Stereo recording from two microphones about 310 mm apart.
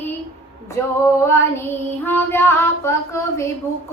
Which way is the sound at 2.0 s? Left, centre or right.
Centre.